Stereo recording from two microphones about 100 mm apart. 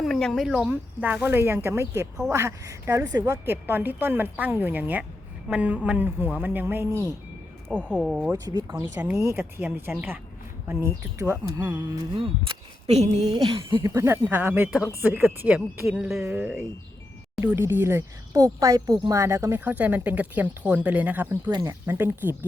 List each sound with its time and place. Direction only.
0.0 s speech: 5° left (ahead or behind)
0.7 s a woman's voice: 15° right (ahead or behind); by 3.3 s 40° right (ahead or behind)
3.4 s a woman's voice: 20° right (ahead or behind)
7.7 s speech: 10° right (ahead or behind)
8.3 s speech: 40° right (ahead or behind)
8.6 s a woman's voice: 30° right (ahead or behind)
9.4 s a woman's voice: 20° right (ahead or behind); by 11.9 s 35° right (ahead or behind)
12.1 s speech: 60° right (ahead or behind)
13.8 s a woman's voice: 30° right (ahead or behind); by 16.2 s 5° right (ahead or behind)
16.2 s a woman's voice: 20° right (ahead or behind)
18.3 s a woman's voice: 35° right (ahead or behind)